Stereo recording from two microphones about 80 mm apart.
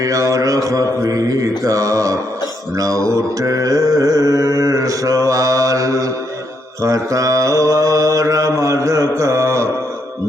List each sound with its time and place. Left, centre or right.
0.0 s mantra: right